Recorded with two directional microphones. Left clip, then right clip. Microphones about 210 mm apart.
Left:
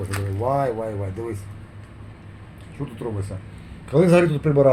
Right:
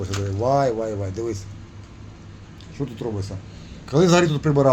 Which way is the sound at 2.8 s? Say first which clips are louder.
Right 2 dB; 30° right (ahead or behind).